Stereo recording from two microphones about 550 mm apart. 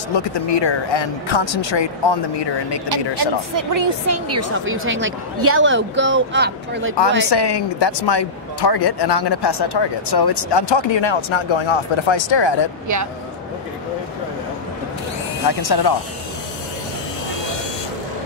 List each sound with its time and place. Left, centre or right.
0.1 s speech: left
3.5 s a woman's voice: right
7.2 s speech: left
12.8 s speech: right
15.6 s speech: left